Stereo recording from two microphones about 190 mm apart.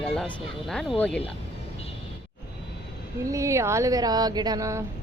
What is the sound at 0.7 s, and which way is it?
Speech, centre (ahead or behind).